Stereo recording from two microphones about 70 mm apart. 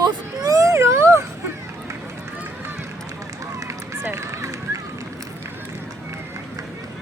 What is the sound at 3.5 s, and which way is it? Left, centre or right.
Run, right.